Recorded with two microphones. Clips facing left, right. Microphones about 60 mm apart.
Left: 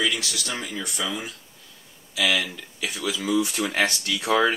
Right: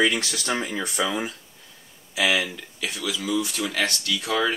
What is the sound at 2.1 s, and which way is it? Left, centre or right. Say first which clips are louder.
Speech: right 1 dB; centre.